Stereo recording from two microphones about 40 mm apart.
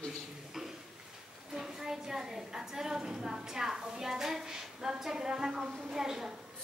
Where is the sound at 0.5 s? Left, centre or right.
Centre.